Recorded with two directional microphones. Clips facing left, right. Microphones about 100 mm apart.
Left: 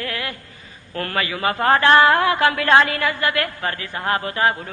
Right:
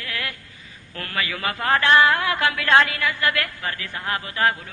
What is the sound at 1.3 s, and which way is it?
A man's voice, 30° left (ahead or behind).